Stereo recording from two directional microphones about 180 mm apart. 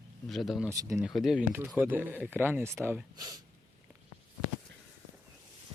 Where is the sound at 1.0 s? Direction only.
Centre (ahead or behind); by 3.4 s 20° right (ahead or behind).